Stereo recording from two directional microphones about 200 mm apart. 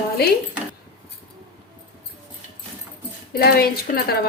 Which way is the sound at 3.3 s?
50° left (ahead or behind).